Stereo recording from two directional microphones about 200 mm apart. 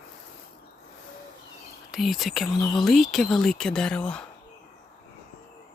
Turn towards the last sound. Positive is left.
turn(degrees=5)  # may be behind; listen again after turning